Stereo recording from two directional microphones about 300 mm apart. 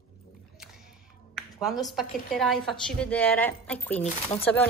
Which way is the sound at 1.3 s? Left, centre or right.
Centre.